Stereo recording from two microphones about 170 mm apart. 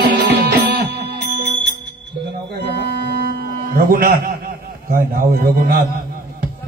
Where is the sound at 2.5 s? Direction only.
75° right (ahead or behind).